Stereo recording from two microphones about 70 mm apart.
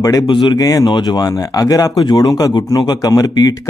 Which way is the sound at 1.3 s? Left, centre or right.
Left.